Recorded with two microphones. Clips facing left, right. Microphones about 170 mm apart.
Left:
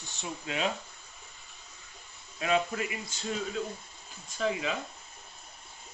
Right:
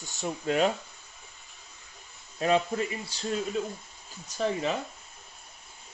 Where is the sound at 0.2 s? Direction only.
45° right (ahead or behind).